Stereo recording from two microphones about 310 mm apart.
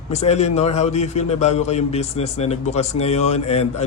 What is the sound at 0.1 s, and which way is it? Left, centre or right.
A man's voice, left.